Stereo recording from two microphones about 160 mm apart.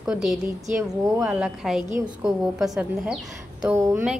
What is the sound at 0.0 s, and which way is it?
A woman's voice, centre (ahead or behind).